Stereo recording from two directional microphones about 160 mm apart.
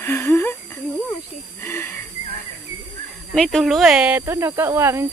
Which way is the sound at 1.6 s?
15° left (ahead or behind).